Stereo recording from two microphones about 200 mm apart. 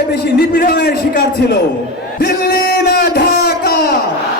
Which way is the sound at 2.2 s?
50° left (ahead or behind).